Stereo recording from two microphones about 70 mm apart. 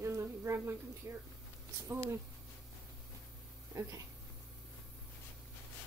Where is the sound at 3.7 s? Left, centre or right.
Right.